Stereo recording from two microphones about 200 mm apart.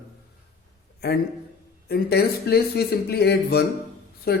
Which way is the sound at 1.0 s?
55° left (ahead or behind).